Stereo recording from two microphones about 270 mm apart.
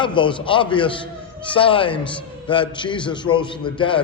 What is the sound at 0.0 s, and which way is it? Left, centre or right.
A man's voice, centre.